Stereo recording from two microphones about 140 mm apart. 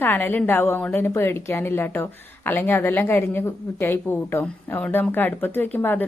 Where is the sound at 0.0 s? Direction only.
15° left (ahead or behind).